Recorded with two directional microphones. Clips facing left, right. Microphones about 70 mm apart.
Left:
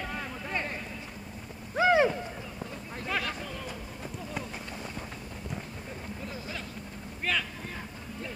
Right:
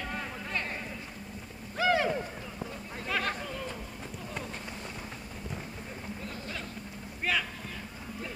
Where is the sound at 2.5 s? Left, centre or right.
Centre.